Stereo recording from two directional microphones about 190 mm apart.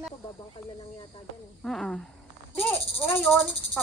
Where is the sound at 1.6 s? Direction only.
Centre (ahead or behind).